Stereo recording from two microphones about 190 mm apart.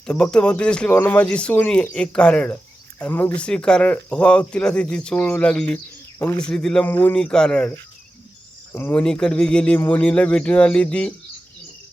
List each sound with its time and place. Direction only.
0.0 s speech: 5° left (ahead or behind)